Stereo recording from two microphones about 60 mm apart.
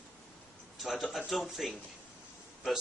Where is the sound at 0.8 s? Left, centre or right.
Centre.